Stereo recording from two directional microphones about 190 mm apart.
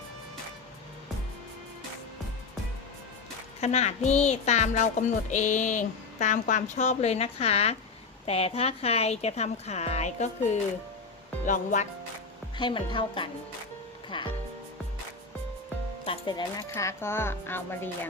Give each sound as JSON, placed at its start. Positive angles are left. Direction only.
{"t": 3.6, "sound": "speech", "side_deg": 35}
{"t": 12.5, "sound": "speech", "side_deg": 25}
{"t": 16.0, "sound": "speech", "side_deg": 25}